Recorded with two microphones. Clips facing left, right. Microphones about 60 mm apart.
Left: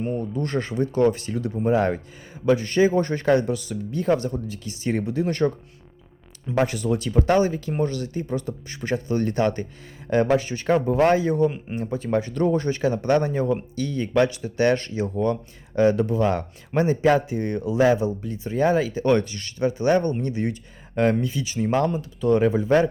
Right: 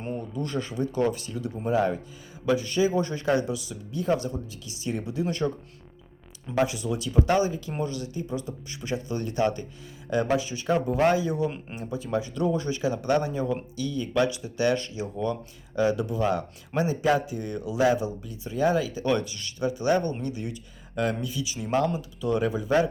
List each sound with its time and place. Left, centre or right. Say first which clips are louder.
0.2 s speech: left 5 dB; left
6.6 s speech: left 3 dB; left